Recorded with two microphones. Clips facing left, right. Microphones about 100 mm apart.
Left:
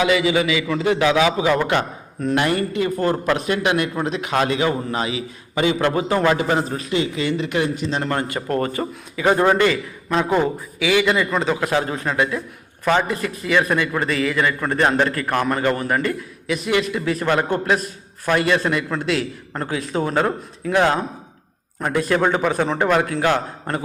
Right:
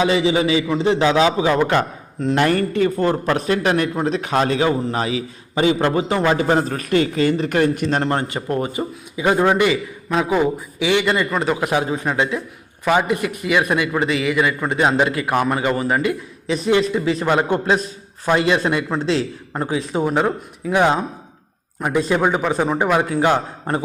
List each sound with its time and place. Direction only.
0.0 s a man's voice: 30° right (ahead or behind)
3.0 s a man's voice: 25° right (ahead or behind)
3.3 s a man's voice: 35° right (ahead or behind)
6.6 s a man's voice: 50° right (ahead or behind)
8.0 s a man's voice: 25° right (ahead or behind); by 10.5 s 5° right (ahead or behind)
10.8 s speech: 20° right (ahead or behind)
11.3 s a man's voice: 5° right (ahead or behind); by 12.4 s 20° right (ahead or behind)
12.8 s a man's voice: 10° right (ahead or behind)
16.5 s a man's voice: 30° right (ahead or behind)